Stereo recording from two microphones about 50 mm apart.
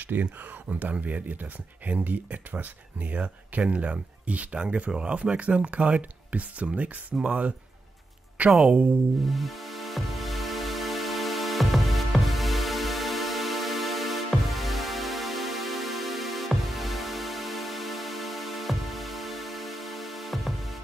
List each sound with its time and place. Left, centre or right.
0.0 s speech: right
8.6 s speech: right
9.2 s music: centre